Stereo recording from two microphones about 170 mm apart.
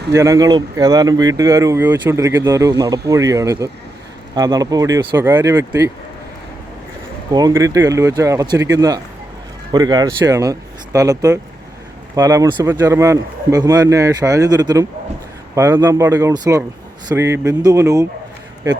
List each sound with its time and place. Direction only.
0.1 s speech: 20° right (ahead or behind)
7.3 s speech: 20° right (ahead or behind)